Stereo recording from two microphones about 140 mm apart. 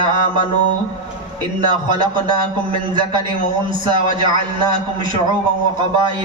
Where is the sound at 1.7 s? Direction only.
35° right (ahead or behind).